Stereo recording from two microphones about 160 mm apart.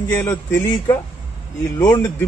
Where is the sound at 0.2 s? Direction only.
15° left (ahead or behind).